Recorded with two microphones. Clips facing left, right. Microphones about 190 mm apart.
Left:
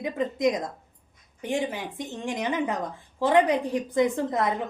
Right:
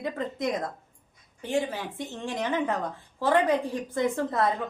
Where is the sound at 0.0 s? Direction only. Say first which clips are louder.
Left 5 dB; 15° left (ahead or behind).